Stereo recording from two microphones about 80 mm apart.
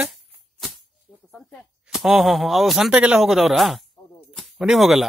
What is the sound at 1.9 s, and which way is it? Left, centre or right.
A man's voice, centre.